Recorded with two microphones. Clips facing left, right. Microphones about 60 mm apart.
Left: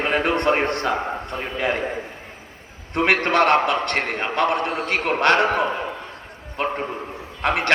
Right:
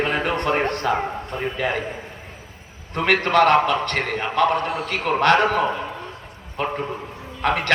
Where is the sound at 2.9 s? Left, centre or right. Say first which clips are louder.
Right 1 dB; left.